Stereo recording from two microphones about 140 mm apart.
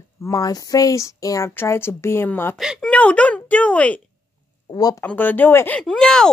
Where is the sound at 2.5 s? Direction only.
5° right (ahead or behind).